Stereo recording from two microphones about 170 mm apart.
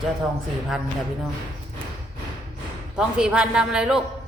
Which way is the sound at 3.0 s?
5° right (ahead or behind).